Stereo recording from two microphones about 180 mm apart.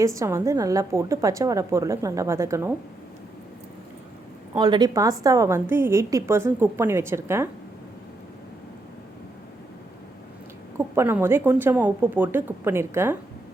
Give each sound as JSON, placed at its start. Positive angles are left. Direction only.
{"t": 0.0, "sound": "a woman's voice", "side_deg": -15}
{"t": 4.5, "sound": "a woman's voice", "side_deg": -25}
{"t": 10.8, "sound": "a woman's voice", "side_deg": -15}